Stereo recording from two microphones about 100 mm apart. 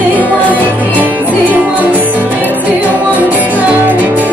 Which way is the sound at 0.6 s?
15° right (ahead or behind).